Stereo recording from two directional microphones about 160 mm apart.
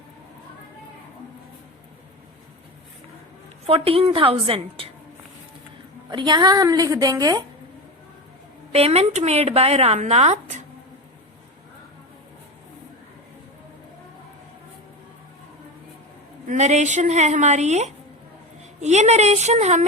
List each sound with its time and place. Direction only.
3.7 s speech: 35° right (ahead or behind)
6.1 s a woman's voice: 30° right (ahead or behind)
8.7 s speech: 40° right (ahead or behind)
16.5 s a woman's voice: 45° right (ahead or behind)